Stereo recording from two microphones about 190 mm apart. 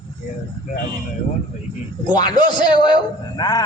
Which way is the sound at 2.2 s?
25° left (ahead or behind).